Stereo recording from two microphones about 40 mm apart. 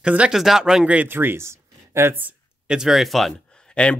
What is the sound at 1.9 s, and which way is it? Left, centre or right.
Speech, right.